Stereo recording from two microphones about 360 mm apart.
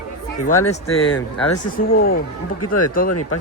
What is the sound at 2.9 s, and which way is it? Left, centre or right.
Speech, left.